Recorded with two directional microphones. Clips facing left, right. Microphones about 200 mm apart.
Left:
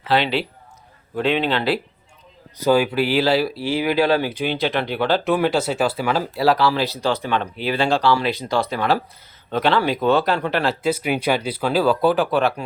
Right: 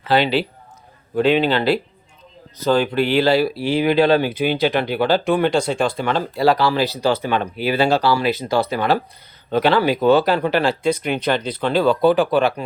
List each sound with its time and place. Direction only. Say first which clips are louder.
0.1 s speech: right 3 dB; centre (ahead or behind)
3.5 s speech: right 3 dB; 15° right (ahead or behind)
4.4 s speech: right 3 dB; 5° right (ahead or behind)